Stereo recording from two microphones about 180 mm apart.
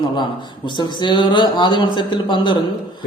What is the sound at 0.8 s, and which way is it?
A man's voice, 25° left (ahead or behind).